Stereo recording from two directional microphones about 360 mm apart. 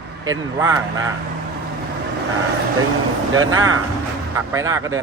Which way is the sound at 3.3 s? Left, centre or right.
Right.